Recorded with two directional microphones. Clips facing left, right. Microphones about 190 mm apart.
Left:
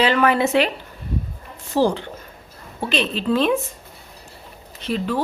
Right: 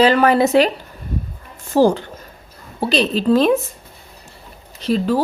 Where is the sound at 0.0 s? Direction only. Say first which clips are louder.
Right 4 dB; 40° right (ahead or behind).